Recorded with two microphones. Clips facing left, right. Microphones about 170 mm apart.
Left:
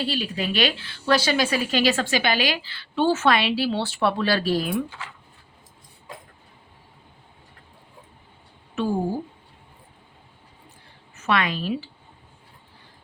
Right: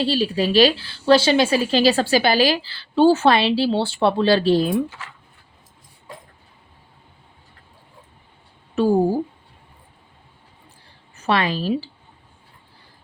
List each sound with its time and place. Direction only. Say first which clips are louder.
0.0 s a woman's voice: right 7 dB; 30° right (ahead or behind)
8.7 s speech: right 7 dB; 35° right (ahead or behind)
11.2 s a woman's voice: right 3 dB; 30° right (ahead or behind)